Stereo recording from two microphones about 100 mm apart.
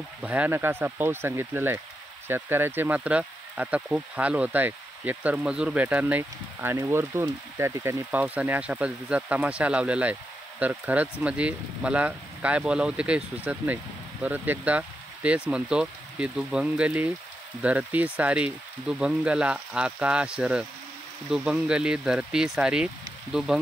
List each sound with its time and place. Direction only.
0.2 s speech: 15° right (ahead or behind)
8.1 s speech: 15° right (ahead or behind)